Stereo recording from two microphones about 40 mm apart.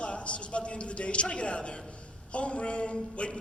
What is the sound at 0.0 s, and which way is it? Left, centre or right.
A man's voice, left.